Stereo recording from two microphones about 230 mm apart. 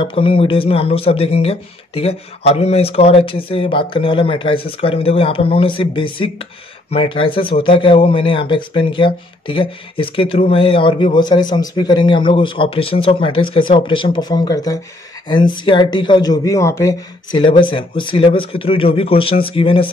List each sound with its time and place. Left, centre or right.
0.0 s speech: left